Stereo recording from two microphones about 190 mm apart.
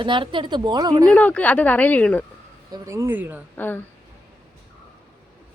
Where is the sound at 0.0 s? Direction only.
25° right (ahead or behind).